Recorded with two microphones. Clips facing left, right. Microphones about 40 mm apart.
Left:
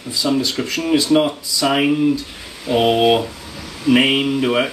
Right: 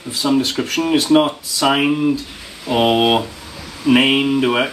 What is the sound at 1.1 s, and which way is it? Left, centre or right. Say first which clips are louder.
Speech: right 2 dB; centre.